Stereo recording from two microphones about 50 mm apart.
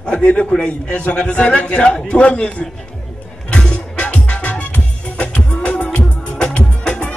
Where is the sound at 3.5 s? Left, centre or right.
Centre.